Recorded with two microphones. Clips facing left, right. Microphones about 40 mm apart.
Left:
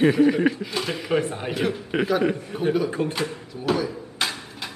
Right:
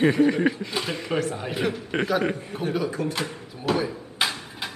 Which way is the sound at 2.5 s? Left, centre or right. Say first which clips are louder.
Left 4 dB; left.